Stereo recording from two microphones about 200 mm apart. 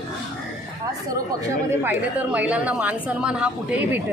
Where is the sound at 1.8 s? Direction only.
10° right (ahead or behind).